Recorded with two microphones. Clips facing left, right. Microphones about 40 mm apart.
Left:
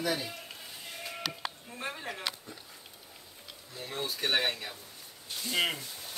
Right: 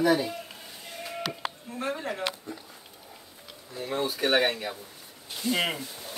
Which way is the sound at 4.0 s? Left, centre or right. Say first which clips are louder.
Right 6 dB; centre.